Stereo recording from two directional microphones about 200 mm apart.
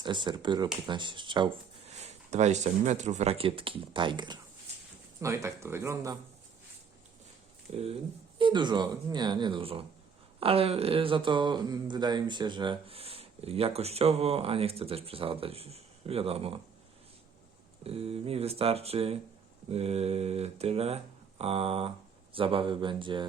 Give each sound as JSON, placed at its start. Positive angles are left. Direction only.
{"t": 0.0, "sound": "speech", "side_deg": -25}
{"t": 7.7, "sound": "speech", "side_deg": -30}
{"t": 17.8, "sound": "speech", "side_deg": -30}